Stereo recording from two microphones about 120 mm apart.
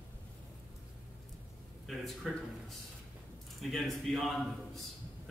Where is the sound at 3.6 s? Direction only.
Centre (ahead or behind).